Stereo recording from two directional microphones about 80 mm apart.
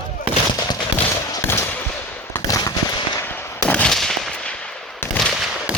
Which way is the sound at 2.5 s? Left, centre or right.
Left.